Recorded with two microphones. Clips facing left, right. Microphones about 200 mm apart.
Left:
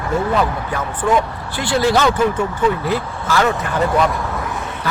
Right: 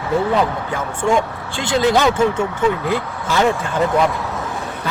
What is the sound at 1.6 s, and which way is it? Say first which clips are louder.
Speech: even; 20° right (ahead or behind).